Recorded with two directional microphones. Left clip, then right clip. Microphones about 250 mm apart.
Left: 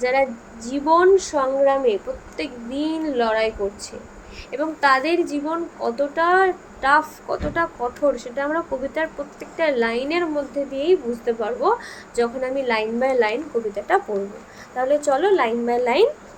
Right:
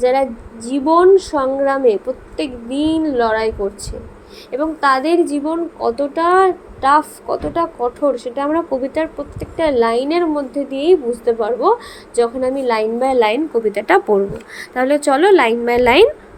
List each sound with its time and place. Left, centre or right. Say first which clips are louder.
0.0 s a woman's voice: right 5 dB; centre
4.5 s a woman's voice: right 3 dB; centre; by 16.0 s right